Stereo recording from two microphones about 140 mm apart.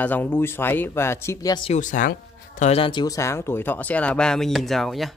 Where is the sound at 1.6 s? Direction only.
60° left (ahead or behind).